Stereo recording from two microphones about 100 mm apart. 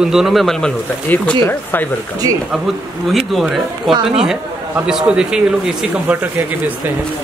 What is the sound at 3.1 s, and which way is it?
Speech, centre (ahead or behind).